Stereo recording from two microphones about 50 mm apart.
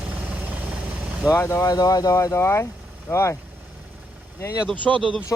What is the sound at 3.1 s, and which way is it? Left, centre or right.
Speech, left.